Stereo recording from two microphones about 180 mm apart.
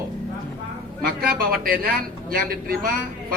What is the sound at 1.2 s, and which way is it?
A man's voice, 55° right (ahead or behind).